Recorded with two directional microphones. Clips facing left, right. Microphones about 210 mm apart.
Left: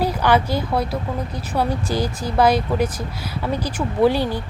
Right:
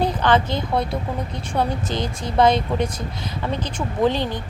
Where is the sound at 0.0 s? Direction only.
10° left (ahead or behind).